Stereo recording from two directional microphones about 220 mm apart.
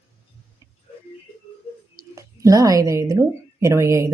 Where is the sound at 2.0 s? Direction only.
15° right (ahead or behind).